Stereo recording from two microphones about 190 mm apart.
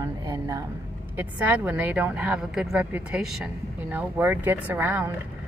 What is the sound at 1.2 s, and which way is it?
Speech, 10° right (ahead or behind).